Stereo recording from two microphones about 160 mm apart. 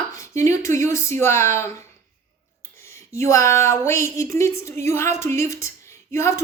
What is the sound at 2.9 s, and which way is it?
A woman's voice, 20° left (ahead or behind).